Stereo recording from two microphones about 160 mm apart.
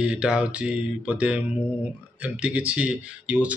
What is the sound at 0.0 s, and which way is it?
Speech, 5° right (ahead or behind).